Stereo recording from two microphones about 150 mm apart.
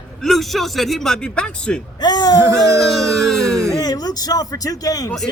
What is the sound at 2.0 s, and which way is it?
Speech, 25° left (ahead or behind).